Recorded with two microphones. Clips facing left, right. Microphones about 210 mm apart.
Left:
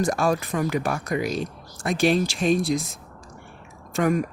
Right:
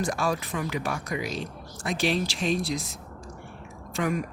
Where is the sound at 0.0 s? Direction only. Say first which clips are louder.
Left 5 dB; 45° left (ahead or behind).